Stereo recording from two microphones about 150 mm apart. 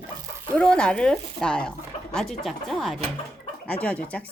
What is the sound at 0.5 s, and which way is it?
A woman's voice, 5° left (ahead or behind).